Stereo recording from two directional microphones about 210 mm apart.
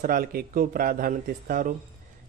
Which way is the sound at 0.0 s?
45° right (ahead or behind).